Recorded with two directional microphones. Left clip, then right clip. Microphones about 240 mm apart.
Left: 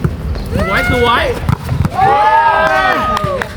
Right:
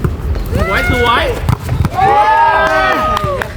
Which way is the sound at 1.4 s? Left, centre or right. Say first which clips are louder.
Even; centre.